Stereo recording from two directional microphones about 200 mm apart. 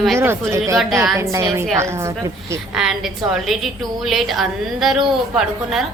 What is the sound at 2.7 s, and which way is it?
A woman's voice, centre (ahead or behind).